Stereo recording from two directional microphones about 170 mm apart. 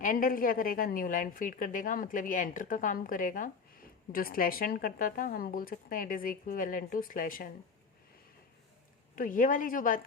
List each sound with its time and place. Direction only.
0.0 s a woman's voice: 55° left (ahead or behind)
9.1 s a woman's voice: 50° left (ahead or behind)